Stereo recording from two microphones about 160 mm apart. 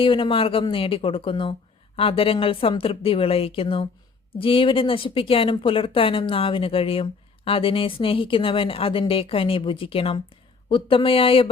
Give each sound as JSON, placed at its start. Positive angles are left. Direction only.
{"t": 0.0, "sound": "speech", "side_deg": 30}